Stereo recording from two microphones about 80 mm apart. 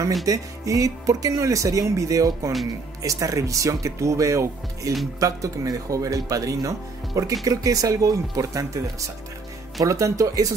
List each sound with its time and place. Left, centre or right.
0.2 s speech: right